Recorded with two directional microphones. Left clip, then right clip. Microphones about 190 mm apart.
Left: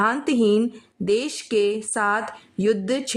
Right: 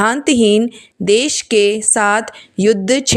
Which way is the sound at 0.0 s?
25° right (ahead or behind).